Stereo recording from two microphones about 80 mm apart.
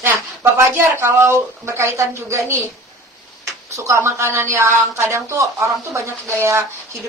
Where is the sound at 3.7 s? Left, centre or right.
Right.